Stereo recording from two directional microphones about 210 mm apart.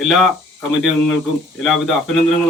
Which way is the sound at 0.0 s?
Centre (ahead or behind).